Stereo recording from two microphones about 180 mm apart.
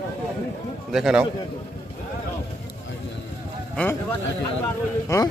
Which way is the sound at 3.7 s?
10° left (ahead or behind).